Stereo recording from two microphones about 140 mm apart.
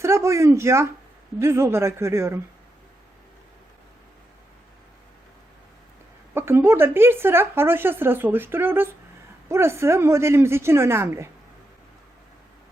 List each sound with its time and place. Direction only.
0.0 s speech: 20° right (ahead or behind)
6.3 s speech: 15° right (ahead or behind)